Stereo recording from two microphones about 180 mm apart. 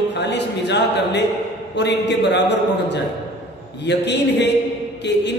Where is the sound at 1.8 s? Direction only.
75° left (ahead or behind).